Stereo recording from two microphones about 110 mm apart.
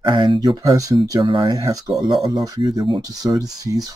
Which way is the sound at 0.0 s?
45° right (ahead or behind).